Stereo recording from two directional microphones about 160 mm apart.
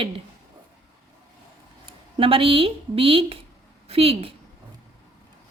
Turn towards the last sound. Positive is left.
turn(degrees=-35)  # may be behind; listen again after turning